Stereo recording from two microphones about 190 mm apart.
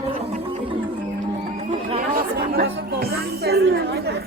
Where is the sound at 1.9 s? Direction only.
50° right (ahead or behind).